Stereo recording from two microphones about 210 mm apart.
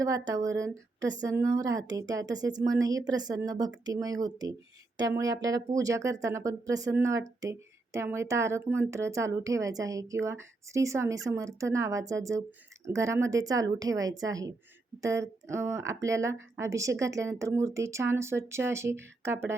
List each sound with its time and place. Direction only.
0.0 s speech: 15° right (ahead or behind)